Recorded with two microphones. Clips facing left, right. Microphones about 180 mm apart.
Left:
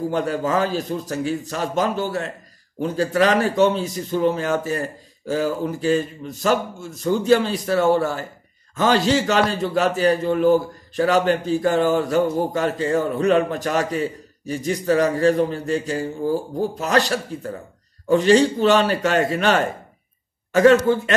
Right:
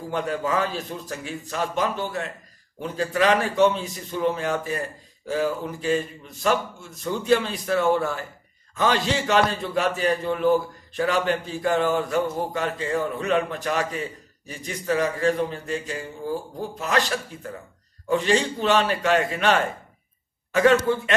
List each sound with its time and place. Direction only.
0.1 s a man's voice: 40° left (ahead or behind)